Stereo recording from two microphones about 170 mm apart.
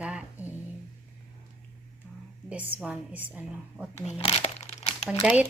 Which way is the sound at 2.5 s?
10° right (ahead or behind).